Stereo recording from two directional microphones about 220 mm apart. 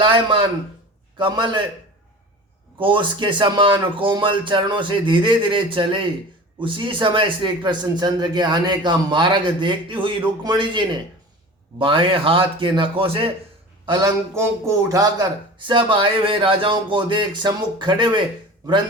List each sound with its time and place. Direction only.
0.0 s speech: 20° right (ahead or behind)
2.8 s speech: 20° right (ahead or behind)